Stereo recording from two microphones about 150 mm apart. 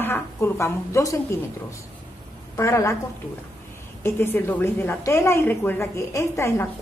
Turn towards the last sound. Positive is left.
turn(degrees=20)  # may be behind; listen again after turning